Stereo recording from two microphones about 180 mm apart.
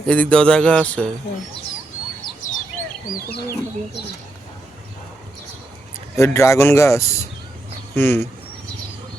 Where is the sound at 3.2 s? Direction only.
60° left (ahead or behind).